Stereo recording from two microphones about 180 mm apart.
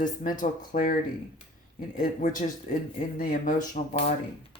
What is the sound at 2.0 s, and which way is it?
Speech, 45° left (ahead or behind).